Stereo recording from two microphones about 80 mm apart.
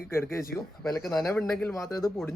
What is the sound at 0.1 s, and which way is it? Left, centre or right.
Speech, left.